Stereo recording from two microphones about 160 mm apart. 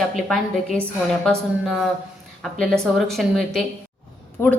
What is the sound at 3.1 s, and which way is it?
Speech, centre (ahead or behind).